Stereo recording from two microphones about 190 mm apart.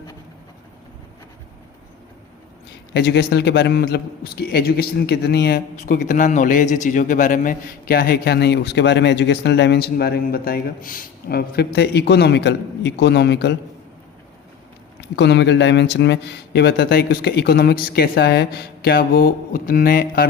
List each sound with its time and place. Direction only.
2.9 s speech: 60° left (ahead or behind)
5.7 s speech: 40° left (ahead or behind); by 13.6 s 65° left (ahead or behind)
15.1 s speech: 65° left (ahead or behind)